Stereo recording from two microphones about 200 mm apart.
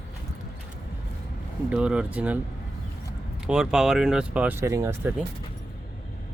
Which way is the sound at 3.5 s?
5° right (ahead or behind).